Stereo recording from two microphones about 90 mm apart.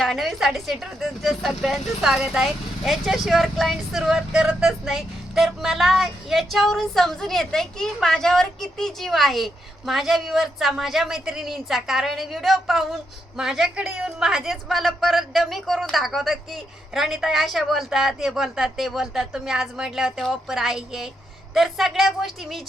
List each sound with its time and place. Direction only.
0.0 s speech: centre (ahead or behind)